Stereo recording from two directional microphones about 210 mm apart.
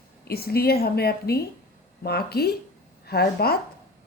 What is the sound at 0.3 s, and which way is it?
A woman's voice, 50° left (ahead or behind).